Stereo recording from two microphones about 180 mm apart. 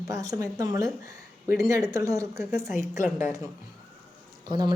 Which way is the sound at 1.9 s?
15° right (ahead or behind).